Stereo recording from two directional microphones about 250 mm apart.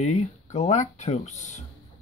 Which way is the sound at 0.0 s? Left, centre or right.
Left.